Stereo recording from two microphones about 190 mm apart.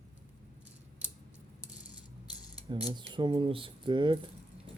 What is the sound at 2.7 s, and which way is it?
Speech, 25° right (ahead or behind).